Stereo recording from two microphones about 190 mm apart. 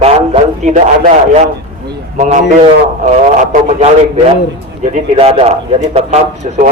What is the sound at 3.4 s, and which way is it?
A man's voice, 35° right (ahead or behind).